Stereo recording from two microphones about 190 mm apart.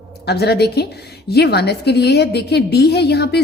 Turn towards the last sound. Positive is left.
turn(degrees=60)  # may be behind; listen again after turning